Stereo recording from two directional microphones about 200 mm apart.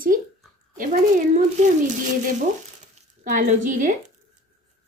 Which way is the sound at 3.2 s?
40° right (ahead or behind).